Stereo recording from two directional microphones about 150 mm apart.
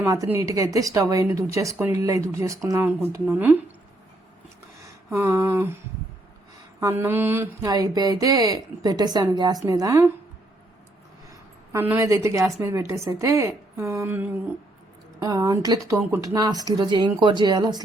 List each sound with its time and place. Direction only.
0.0 s a woman's voice: 20° right (ahead or behind)
3.1 s mantra: 15° right (ahead or behind)
4.8 s a sound: 15° right (ahead or behind)
6.7 s mantra: 15° right (ahead or behind)
7.6 s a woman's voice: 25° right (ahead or behind)
11.3 s a woman's voice: 15° right (ahead or behind)